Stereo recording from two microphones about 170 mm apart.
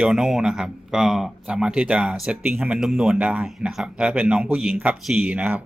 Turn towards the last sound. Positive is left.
turn(degrees=-10)  # may be behind; listen again after turning